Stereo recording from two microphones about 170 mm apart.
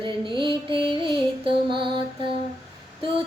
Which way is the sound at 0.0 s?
30° right (ahead or behind).